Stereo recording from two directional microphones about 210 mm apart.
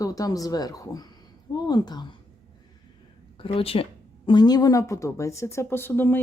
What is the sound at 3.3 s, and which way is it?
Speech, 25° left (ahead or behind).